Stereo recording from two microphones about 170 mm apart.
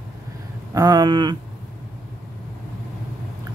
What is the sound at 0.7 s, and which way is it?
Speech, 25° right (ahead or behind).